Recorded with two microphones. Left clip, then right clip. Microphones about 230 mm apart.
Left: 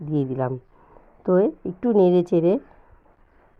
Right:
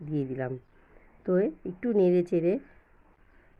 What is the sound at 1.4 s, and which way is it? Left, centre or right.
Speech, centre.